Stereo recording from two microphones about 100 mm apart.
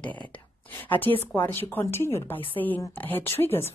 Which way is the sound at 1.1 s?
30° left (ahead or behind).